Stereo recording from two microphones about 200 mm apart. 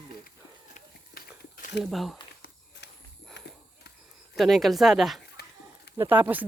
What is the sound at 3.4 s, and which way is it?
Clip-clop, 60° left (ahead or behind).